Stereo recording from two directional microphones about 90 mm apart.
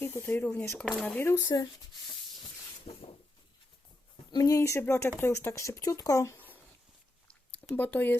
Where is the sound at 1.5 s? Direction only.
45° left (ahead or behind).